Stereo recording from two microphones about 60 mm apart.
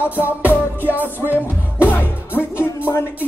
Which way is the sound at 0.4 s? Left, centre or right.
Left.